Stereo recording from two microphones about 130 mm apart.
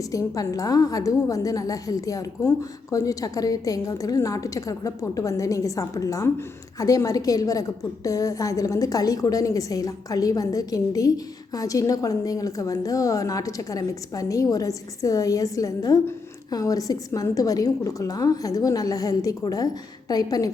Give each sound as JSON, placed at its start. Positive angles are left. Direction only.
{"t": 0.1, "sound": "a woman's voice", "side_deg": 25}